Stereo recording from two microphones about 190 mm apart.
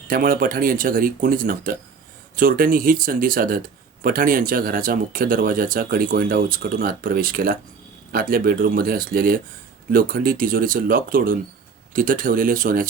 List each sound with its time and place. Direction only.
0.1 s speech: 50° right (ahead or behind)